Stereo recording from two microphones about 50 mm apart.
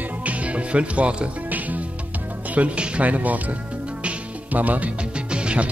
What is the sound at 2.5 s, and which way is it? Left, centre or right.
Speech, right.